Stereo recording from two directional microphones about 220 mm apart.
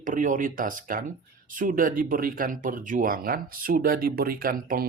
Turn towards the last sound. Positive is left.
turn(degrees=-40)  # may be behind; listen again after turning